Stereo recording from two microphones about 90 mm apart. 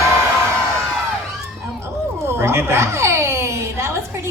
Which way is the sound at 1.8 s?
30° right (ahead or behind).